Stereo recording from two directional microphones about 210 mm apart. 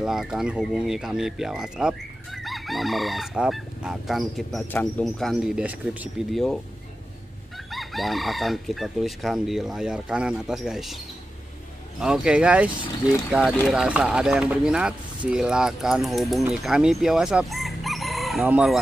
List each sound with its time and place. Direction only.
0.0 s speech: centre (ahead or behind)
7.7 s speech: centre (ahead or behind)
12.0 s speech: 5° right (ahead or behind)
12.8 s speech: 20° left (ahead or behind)
13.3 s speech: 5° right (ahead or behind)